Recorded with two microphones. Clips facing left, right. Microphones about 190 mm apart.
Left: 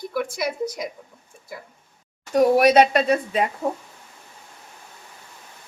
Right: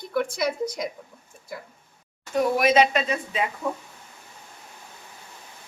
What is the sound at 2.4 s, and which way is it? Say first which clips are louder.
Speech: left 5 dB; 40° left (ahead or behind).